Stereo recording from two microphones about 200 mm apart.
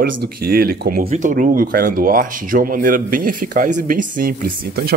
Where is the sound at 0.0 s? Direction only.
50° right (ahead or behind).